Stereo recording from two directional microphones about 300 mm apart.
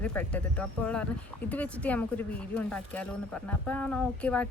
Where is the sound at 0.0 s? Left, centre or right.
Centre.